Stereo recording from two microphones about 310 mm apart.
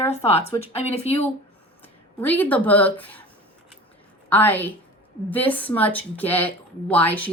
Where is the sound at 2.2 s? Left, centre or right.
Centre.